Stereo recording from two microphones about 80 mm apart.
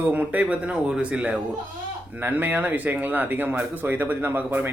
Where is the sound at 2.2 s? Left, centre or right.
Right.